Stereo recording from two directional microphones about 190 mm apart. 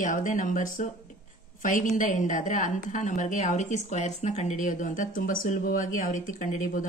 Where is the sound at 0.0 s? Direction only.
45° left (ahead or behind).